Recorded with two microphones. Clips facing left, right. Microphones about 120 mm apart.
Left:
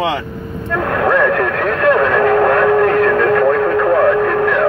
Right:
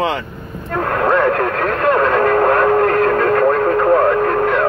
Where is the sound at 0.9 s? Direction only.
30° right (ahead or behind).